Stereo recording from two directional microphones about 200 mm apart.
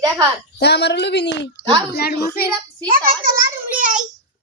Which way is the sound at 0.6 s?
60° left (ahead or behind).